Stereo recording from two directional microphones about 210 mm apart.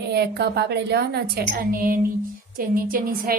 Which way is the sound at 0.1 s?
50° right (ahead or behind).